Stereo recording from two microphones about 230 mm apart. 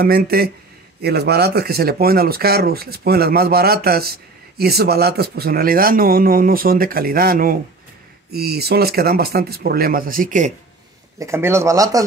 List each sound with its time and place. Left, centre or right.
0.0 s speech: right
11.1 s speech: centre